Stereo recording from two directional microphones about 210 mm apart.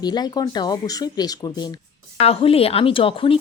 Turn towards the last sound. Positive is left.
turn(degrees=25)  # may be behind; listen again after turning